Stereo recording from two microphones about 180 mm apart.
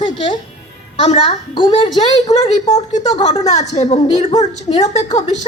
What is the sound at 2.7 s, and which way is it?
Speech, 40° left (ahead or behind).